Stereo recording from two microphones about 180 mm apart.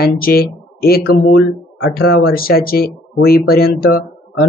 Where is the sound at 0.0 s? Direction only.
55° left (ahead or behind).